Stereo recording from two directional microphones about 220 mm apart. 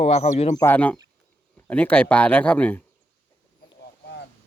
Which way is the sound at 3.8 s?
50° left (ahead or behind).